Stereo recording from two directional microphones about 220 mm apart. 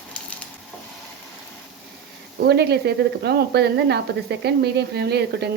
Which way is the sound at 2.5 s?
50° right (ahead or behind).